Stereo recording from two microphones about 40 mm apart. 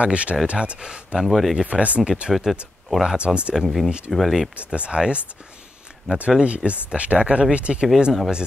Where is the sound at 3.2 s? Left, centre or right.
Right.